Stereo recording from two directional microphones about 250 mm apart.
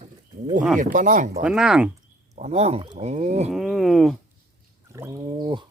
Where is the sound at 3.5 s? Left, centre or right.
Centre.